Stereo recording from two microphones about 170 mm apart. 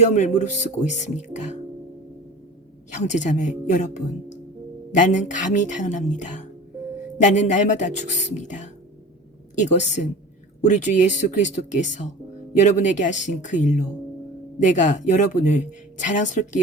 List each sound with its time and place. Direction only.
0.0 s speech: 40° left (ahead or behind)
2.9 s speech: 45° left (ahead or behind)